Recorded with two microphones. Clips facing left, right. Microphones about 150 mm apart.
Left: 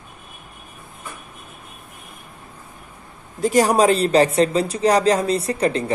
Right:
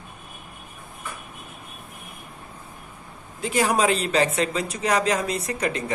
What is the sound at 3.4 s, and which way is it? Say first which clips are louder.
Speech: left 6 dB; 40° left (ahead or behind).